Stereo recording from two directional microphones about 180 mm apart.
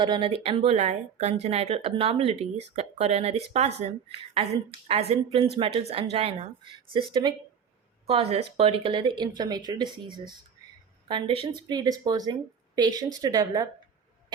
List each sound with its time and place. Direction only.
0.0 s speech: 25° right (ahead or behind)
4.9 s a woman's voice: 35° right (ahead or behind)